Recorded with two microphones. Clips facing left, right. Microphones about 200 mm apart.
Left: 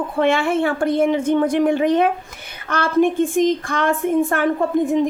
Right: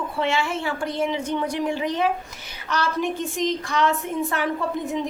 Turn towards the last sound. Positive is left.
turn(degrees=50)  # may be behind; listen again after turning